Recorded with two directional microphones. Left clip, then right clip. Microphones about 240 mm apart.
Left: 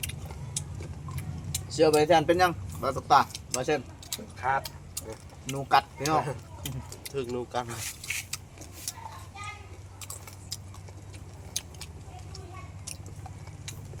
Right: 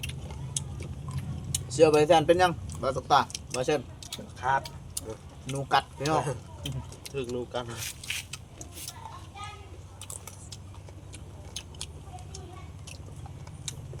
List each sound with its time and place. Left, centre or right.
0.6 s a sound: centre
1.5 s speech: centre
3.5 s keys jangling: centre
4.4 s vehicle: centre
4.9 s speech: centre
7.3 s speech: left
8.0 s a sound: centre